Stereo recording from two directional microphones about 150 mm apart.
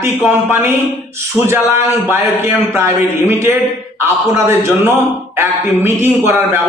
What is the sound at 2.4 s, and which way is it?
A man's voice, 15° right (ahead or behind).